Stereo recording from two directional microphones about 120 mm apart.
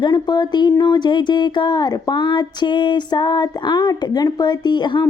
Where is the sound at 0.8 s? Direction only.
35° left (ahead or behind).